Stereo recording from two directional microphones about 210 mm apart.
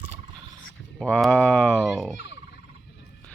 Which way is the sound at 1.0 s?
5° left (ahead or behind).